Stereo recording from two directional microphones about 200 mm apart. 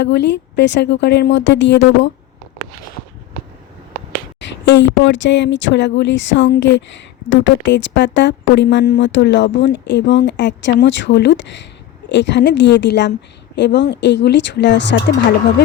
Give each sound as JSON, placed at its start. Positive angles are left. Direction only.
{"t": 0.0, "sound": "speech", "side_deg": 60}
{"t": 4.6, "sound": "speech", "side_deg": 65}